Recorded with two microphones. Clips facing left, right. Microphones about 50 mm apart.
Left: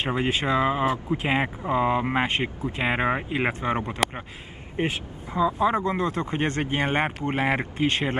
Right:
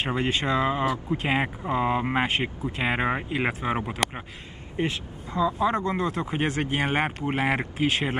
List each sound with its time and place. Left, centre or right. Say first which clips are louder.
0.0 s speech: left 1 dB; centre
4.7 s speech: left 1 dB; centre
5.5 s speech: left 2 dB; centre